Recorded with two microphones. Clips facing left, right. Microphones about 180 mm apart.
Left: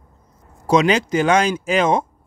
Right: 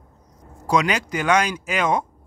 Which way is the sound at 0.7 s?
25° left (ahead or behind).